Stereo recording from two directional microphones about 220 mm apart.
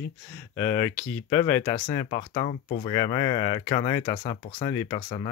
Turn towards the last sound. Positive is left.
turn(degrees=20)  # may be behind; listen again after turning